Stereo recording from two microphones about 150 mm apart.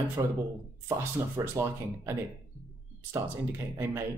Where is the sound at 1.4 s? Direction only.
15° right (ahead or behind).